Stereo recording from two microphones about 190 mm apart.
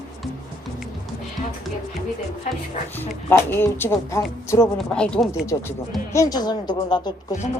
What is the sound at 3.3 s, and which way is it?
Speech, 10° left (ahead or behind).